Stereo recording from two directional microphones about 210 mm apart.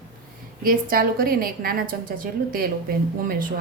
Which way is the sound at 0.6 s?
45° right (ahead or behind).